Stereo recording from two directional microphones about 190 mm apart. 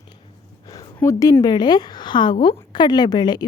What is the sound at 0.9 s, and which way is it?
A woman's voice, 15° left (ahead or behind).